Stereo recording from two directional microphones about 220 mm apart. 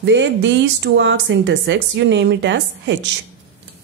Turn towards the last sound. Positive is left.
turn(degrees=-55)  # may be behind; listen again after turning